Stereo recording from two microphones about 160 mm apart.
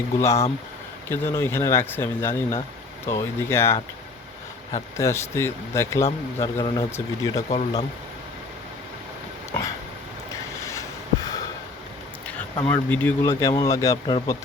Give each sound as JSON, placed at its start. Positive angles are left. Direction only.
{"t": 0.2, "sound": "speech", "side_deg": 20}
{"t": 4.9, "sound": "speech", "side_deg": 15}
{"t": 7.5, "sound": "speech", "side_deg": 40}
{"t": 9.5, "sound": "a sound", "side_deg": 20}
{"t": 12.6, "sound": "speech", "side_deg": 10}